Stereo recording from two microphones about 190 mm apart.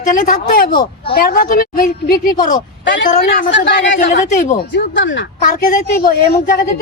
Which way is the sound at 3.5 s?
65° left (ahead or behind).